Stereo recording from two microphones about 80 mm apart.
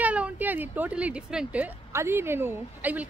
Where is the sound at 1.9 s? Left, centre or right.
Right.